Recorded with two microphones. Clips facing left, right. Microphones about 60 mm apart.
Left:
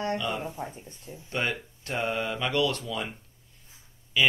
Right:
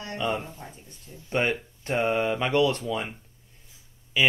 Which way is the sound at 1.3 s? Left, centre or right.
Right.